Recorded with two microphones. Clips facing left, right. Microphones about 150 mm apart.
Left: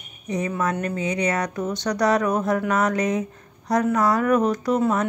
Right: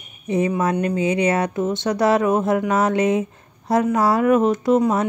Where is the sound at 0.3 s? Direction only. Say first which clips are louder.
Right 5 dB; 25° right (ahead or behind).